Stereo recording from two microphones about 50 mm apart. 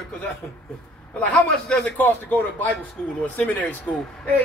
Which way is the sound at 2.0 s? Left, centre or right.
Left.